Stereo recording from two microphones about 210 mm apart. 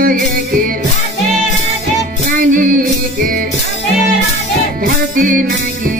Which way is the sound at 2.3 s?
40° right (ahead or behind).